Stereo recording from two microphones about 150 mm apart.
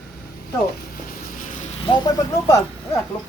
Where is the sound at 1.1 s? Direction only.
65° left (ahead or behind).